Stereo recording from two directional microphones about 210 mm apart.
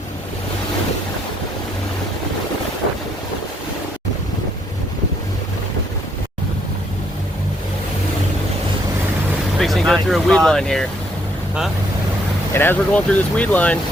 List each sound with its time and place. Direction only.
9.6 s speech: centre (ahead or behind)
12.5 s speech: 10° left (ahead or behind)